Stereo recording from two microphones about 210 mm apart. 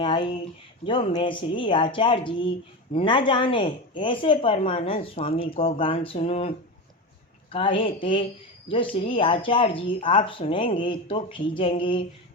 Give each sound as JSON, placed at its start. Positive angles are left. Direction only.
{"t": 0.0, "sound": "speech", "side_deg": 25}
{"t": 7.5, "sound": "speech", "side_deg": 25}